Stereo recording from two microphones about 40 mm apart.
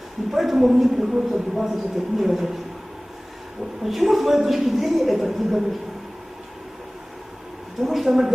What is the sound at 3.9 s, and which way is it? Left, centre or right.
Speech, centre.